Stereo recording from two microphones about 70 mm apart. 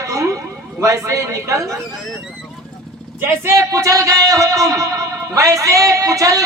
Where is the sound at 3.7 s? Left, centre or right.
Right.